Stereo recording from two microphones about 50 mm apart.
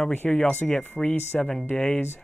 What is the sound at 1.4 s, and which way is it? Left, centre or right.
Speech, centre.